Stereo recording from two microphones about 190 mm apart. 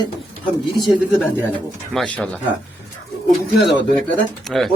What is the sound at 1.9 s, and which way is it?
Speech, 5° left (ahead or behind).